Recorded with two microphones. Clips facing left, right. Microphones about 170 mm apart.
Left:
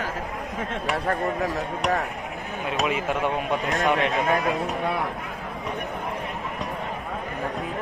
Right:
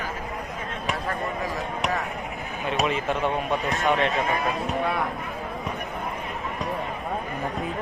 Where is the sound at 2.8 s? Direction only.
10° left (ahead or behind).